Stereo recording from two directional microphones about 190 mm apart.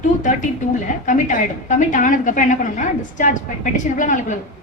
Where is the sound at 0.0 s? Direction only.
40° left (ahead or behind).